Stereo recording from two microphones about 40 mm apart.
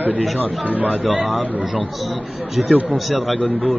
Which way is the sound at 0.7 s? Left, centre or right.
Right.